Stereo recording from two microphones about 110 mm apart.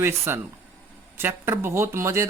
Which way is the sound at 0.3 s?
20° right (ahead or behind).